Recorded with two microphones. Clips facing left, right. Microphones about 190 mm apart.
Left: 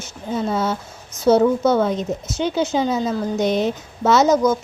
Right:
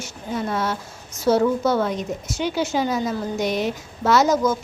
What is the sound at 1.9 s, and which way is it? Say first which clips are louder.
A woman's voice: left 3 dB; 25° left (ahead or behind).